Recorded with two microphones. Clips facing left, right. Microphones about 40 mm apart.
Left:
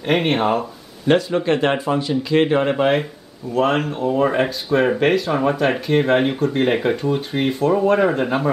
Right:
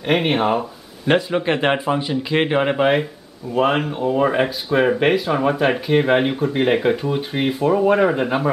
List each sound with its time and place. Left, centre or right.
0.0 s speech: centre
1.0 s a man's voice: centre
2.7 s speech: centre